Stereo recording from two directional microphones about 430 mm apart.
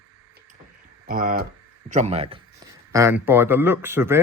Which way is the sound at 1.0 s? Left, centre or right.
Centre.